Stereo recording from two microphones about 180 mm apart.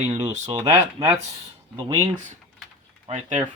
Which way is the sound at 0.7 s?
15° right (ahead or behind).